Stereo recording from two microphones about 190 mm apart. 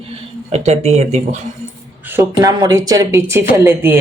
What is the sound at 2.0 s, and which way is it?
Speech, 10° right (ahead or behind).